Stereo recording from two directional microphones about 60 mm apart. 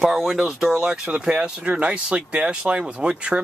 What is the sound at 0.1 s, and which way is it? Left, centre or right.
Speech, centre.